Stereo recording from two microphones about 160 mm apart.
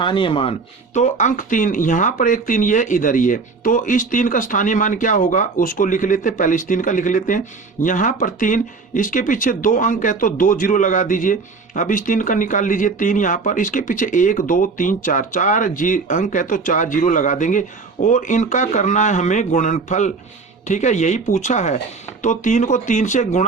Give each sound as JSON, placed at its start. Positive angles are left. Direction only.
{"t": 0.0, "sound": "speech", "side_deg": 30}
{"t": 0.9, "sound": "speech", "side_deg": 50}